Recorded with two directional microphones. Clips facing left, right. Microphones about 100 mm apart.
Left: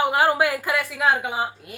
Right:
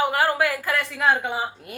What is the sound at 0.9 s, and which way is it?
Speech, 5° left (ahead or behind).